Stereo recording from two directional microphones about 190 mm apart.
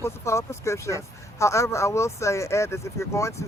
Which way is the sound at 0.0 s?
15° left (ahead or behind).